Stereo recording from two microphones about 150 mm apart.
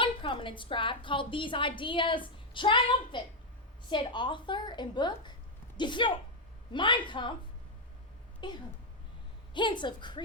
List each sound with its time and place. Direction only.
0.0 s a woman's voice: 35° left (ahead or behind)
8.4 s a woman's voice: 30° left (ahead or behind)